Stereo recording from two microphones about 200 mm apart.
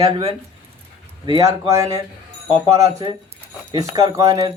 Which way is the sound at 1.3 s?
15° right (ahead or behind).